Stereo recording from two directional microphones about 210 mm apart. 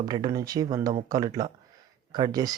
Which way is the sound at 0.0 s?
20° right (ahead or behind).